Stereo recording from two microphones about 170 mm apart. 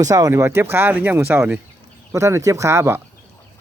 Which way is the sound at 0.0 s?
20° right (ahead or behind).